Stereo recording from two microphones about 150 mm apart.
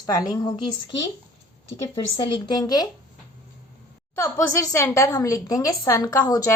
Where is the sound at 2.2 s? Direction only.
30° left (ahead or behind).